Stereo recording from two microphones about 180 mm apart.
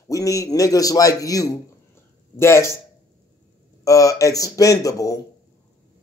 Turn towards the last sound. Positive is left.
turn(degrees=20)  # may be behind; listen again after turning